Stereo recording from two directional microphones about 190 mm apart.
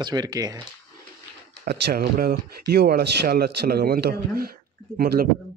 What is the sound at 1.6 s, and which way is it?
Speech, 60° right (ahead or behind).